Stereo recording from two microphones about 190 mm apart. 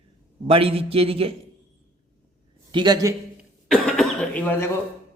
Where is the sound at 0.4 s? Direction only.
30° right (ahead or behind).